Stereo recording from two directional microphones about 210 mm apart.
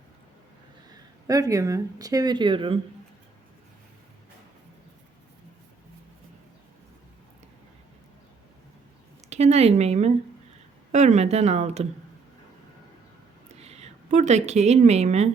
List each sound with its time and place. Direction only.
1.3 s speech: 15° right (ahead or behind)
9.3 s speech: 30° right (ahead or behind)
13.6 s speech: 30° right (ahead or behind)